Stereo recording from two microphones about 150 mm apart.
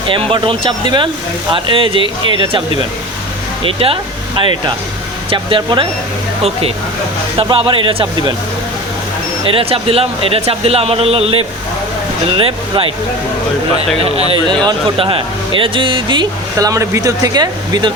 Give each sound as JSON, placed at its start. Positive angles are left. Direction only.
{"t": 0.1, "sound": "speech", "side_deg": -35}
{"t": 3.6, "sound": "speech", "side_deg": -40}
{"t": 9.5, "sound": "speech", "side_deg": -40}
{"t": 14.0, "sound": "speech", "side_deg": -40}